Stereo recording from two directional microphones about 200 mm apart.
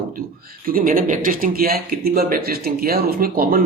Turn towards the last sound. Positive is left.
turn(degrees=-45)  # may be behind; listen again after turning